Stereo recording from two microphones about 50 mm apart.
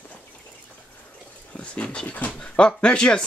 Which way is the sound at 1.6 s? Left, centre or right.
Left.